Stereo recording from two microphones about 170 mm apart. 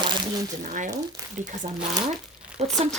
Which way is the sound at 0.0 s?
25° right (ahead or behind).